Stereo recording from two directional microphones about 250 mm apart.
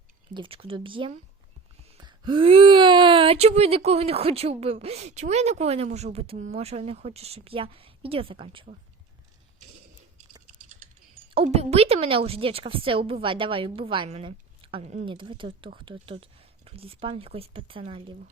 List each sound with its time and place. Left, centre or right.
0.3 s a woman's voice: right
11.3 s a woman's voice: right